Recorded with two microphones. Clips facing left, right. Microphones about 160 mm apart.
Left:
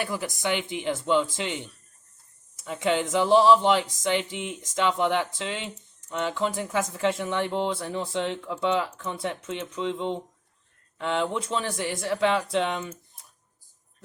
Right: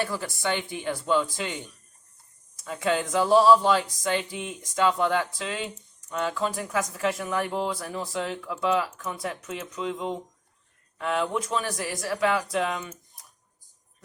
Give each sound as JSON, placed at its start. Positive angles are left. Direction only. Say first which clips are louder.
{"t": 0.0, "sound": "speech", "louder": "even", "side_deg": 15}